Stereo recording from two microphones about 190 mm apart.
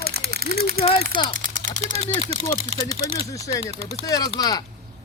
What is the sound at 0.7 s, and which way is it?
Speech, 30° left (ahead or behind).